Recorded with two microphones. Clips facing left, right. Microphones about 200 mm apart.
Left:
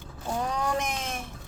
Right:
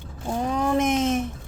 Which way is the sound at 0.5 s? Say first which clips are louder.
Right 8 dB; 25° right (ahead or behind).